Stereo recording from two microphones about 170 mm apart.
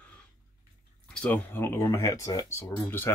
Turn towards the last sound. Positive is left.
turn(degrees=15)  # may be behind; listen again after turning